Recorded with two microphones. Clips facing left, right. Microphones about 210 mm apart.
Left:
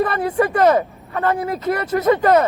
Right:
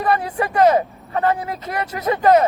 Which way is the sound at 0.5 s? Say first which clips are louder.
Right 4 dB; 50° left (ahead or behind).